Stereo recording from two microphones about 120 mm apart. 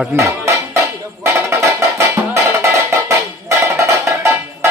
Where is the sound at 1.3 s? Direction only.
25° right (ahead or behind).